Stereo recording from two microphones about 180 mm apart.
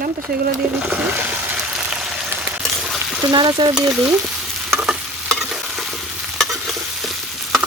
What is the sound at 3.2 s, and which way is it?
Speech, 20° right (ahead or behind).